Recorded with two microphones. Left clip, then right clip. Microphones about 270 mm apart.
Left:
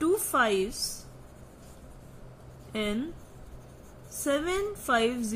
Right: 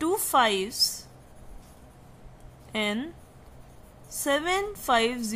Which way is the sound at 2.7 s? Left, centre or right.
Right.